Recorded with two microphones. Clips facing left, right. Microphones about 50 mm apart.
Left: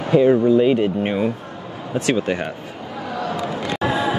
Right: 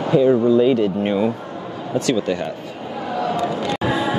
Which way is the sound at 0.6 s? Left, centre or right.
Left.